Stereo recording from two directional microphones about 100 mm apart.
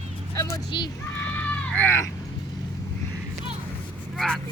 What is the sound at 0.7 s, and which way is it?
Speech, 50° left (ahead or behind).